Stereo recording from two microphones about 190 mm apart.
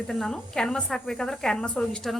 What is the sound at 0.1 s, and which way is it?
A woman's voice, 5° left (ahead or behind).